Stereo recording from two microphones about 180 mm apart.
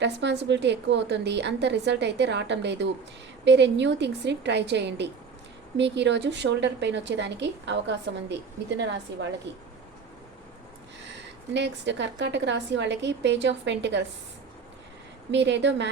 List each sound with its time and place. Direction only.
0.0 s a woman's voice: 75° right (ahead or behind)
11.5 s a woman's voice: 75° right (ahead or behind)
15.3 s a woman's voice: 80° right